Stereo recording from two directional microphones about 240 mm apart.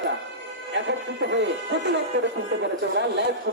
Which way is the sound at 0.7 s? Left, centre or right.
Right.